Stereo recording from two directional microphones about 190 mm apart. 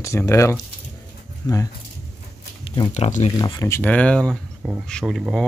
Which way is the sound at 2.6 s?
25° left (ahead or behind).